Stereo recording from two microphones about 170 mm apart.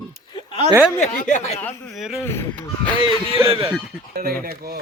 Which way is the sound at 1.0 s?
45° left (ahead or behind).